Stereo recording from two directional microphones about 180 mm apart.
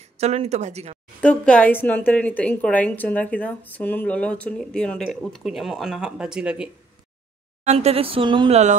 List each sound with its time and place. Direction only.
0.0 s speech: 35° right (ahead or behind)
1.2 s a woman's voice: 5° left (ahead or behind)
7.6 s speech: 35° right (ahead or behind)